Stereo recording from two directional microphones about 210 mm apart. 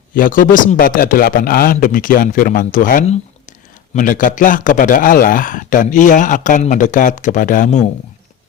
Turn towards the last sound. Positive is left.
turn(degrees=35)  # may be behind; listen again after turning